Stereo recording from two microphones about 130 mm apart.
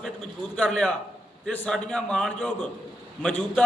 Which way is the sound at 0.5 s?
10° left (ahead or behind).